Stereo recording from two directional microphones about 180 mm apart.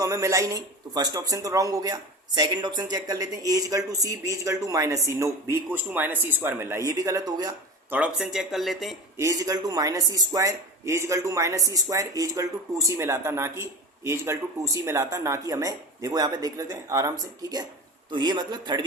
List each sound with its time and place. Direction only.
0.0 s speech: 15° right (ahead or behind)
7.9 s speech: 5° right (ahead or behind)
9.1 s speech: 20° right (ahead or behind)